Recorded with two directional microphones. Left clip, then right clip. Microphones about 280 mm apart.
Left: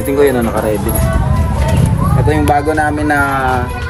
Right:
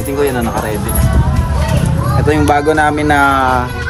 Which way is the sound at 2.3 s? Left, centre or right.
Right.